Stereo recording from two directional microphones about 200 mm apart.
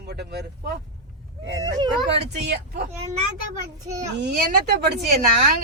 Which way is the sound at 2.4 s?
55° right (ahead or behind).